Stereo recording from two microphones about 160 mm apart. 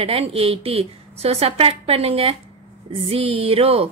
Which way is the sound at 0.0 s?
35° right (ahead or behind).